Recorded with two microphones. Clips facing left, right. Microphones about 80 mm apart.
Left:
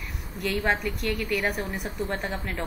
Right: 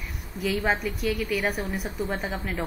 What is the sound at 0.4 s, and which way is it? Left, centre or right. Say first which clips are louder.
A woman's voice: right 1 dB; centre.